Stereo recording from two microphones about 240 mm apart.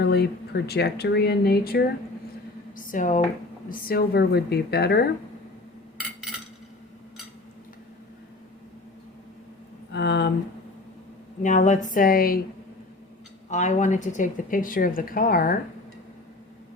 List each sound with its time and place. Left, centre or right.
0.0 s speech: left
9.9 s speech: left
11.4 s speech: left
13.5 s speech: left